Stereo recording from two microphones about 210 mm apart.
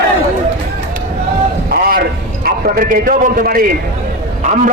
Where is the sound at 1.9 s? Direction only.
45° right (ahead or behind).